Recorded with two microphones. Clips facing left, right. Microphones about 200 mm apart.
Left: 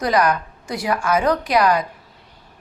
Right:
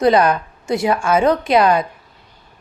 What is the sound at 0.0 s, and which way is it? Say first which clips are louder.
A woman's voice: right 5 dB; 25° right (ahead or behind).